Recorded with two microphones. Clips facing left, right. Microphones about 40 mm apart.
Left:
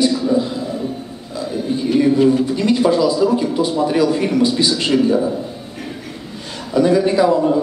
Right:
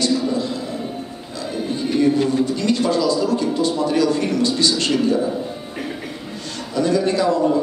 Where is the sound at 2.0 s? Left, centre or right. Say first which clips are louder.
Left 3 dB; centre.